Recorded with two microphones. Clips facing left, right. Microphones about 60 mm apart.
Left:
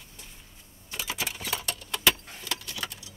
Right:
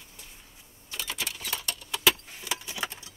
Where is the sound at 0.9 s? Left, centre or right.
Centre.